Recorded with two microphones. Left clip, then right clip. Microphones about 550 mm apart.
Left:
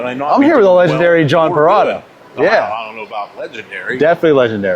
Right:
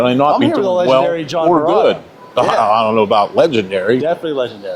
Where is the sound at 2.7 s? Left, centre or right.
Right.